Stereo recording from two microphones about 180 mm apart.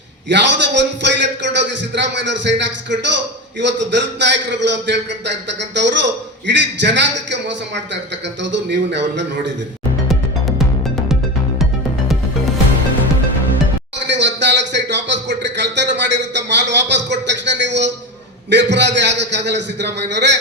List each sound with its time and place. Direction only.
0.3 s a man's voice: 80° right
14.1 s a sound: 75° right (ahead or behind)
18.5 s a man's voice: 75° right (ahead or behind)